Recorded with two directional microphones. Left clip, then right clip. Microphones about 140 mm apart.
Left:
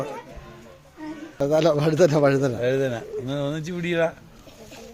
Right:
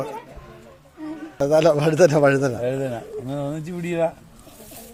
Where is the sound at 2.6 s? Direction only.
25° left (ahead or behind).